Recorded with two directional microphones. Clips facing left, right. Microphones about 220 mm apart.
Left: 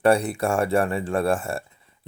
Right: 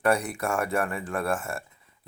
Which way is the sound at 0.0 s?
30° left (ahead or behind).